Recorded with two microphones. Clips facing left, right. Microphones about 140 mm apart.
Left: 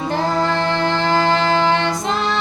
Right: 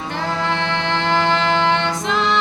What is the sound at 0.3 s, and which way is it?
Music, 35° left (ahead or behind).